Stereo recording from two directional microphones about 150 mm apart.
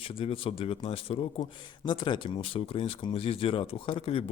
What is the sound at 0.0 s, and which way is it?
Speech, 40° left (ahead or behind).